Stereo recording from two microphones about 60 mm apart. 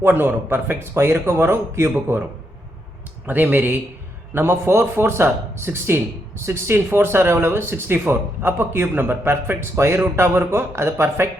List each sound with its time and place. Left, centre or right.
0.0 s speech: right
3.2 s speech: right
4.4 s speech: right